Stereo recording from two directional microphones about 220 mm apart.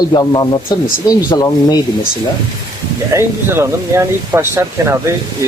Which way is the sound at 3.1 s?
10° right (ahead or behind).